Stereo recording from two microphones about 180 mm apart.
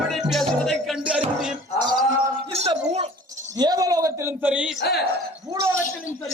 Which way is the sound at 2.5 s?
35° right (ahead or behind).